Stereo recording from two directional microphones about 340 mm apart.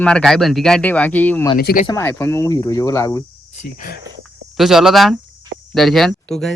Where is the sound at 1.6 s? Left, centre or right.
Left.